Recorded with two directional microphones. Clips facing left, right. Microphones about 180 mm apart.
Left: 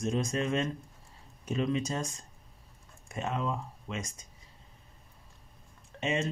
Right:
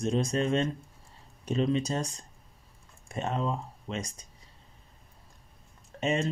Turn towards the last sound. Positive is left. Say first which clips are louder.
# right 3 dB
turn(degrees=-40)  # may be behind; listen again after turning